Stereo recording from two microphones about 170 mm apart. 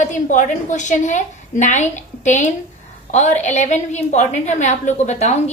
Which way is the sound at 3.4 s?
45° left (ahead or behind).